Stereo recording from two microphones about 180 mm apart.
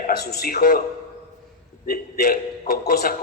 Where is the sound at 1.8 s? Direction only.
55° left (ahead or behind).